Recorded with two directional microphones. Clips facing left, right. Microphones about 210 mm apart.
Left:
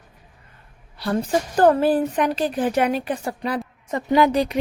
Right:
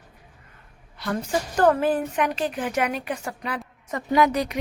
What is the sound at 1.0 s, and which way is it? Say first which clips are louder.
A woman's voice: left 4 dB; 35° left (ahead or behind).